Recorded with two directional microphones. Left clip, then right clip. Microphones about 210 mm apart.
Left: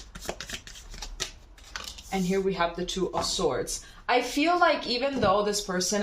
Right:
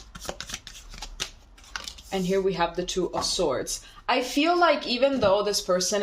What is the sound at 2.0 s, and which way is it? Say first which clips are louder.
Speech: right 3 dB; 50° right (ahead or behind).